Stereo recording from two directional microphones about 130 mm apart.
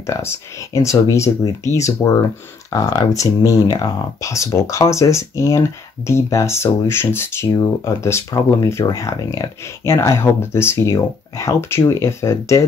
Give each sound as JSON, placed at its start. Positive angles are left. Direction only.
{"t": 0.0, "sound": "speech", "side_deg": 20}
{"t": 2.7, "sound": "speech", "side_deg": 25}